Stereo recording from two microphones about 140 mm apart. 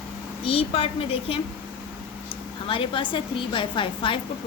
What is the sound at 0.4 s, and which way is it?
Speech, 40° left (ahead or behind).